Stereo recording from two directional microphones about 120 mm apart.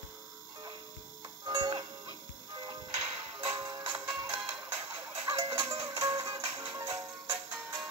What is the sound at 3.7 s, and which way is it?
Music, 25° right (ahead or behind).